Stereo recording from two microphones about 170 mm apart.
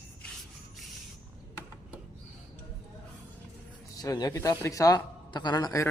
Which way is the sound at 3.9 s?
20° left (ahead or behind).